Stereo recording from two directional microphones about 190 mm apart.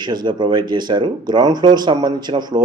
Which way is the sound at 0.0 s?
25° right (ahead or behind).